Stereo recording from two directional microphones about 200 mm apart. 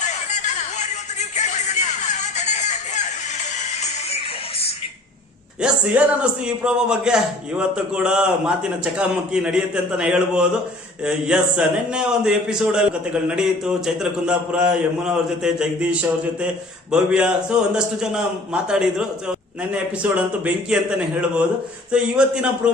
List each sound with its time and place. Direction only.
0.0 s music: 35° left (ahead or behind)
5.6 s a man's voice: 5° right (ahead or behind)